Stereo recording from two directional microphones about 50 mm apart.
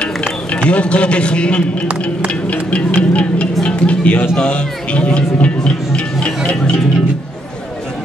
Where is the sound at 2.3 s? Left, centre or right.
Left.